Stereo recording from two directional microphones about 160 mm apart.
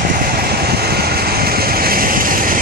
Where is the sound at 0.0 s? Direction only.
65° right (ahead or behind).